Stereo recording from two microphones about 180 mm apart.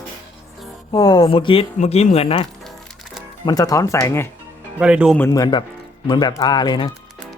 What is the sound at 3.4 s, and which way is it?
Speech, 20° left (ahead or behind).